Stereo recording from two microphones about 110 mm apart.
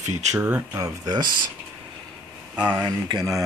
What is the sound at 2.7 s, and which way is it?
Speech, 40° right (ahead or behind).